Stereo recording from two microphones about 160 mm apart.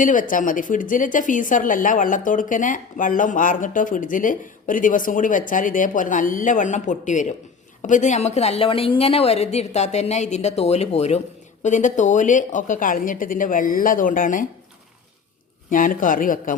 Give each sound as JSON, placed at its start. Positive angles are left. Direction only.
{"t": 0.0, "sound": "a woman's voice", "side_deg": 55}
{"t": 15.7, "sound": "speech", "side_deg": 55}